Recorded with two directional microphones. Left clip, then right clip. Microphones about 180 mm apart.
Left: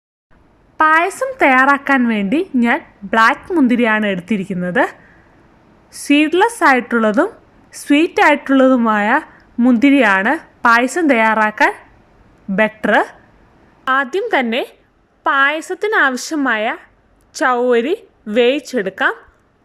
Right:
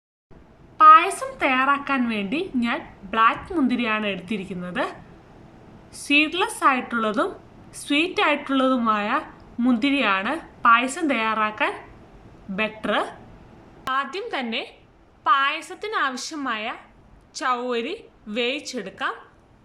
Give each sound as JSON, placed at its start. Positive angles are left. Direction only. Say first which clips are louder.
{"t": 0.8, "sound": "a woman's voice", "louder": "even", "side_deg": 40}